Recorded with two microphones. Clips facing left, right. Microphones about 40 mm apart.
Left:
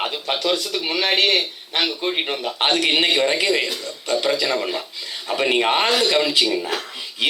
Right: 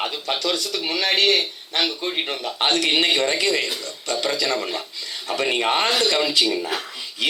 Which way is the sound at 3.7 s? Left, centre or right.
Centre.